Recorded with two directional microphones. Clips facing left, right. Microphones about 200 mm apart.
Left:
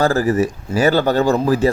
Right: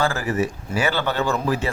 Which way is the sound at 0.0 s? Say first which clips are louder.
Left 6 dB; 40° left (ahead or behind).